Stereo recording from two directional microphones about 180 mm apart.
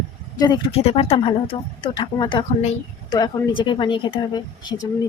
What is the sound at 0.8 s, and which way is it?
Speech, 30° left (ahead or behind).